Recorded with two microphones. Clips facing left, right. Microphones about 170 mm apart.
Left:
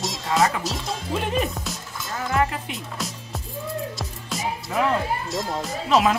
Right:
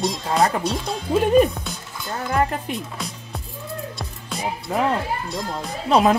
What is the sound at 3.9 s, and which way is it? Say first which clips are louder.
Music: even; centre (ahead or behind).